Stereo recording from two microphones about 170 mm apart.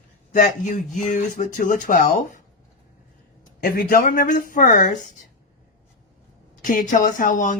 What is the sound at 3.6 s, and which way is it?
Speech, 60° left (ahead or behind).